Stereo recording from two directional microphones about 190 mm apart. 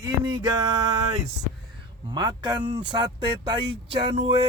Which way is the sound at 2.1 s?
20° right (ahead or behind).